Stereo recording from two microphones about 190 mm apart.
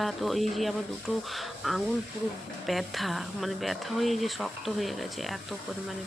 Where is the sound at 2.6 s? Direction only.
Centre (ahead or behind).